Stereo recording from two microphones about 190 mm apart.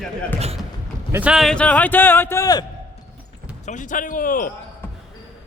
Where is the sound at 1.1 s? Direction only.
5° right (ahead or behind); by 2.6 s 20° left (ahead or behind).